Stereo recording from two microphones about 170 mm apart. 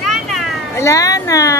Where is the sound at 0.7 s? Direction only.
15° left (ahead or behind).